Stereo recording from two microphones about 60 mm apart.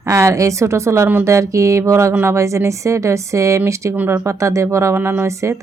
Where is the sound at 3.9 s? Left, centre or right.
Right.